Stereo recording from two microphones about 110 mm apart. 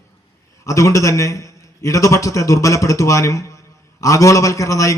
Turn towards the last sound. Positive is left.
turn(degrees=30)  # may be behind; listen again after turning